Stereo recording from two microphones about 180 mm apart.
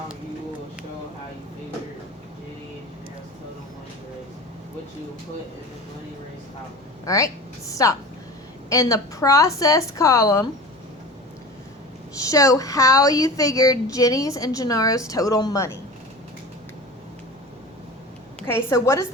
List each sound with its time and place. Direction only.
7.0 s a woman's voice: 20° left (ahead or behind)
12.1 s speech: 20° left (ahead or behind)
18.3 s a woman's voice: 15° left (ahead or behind)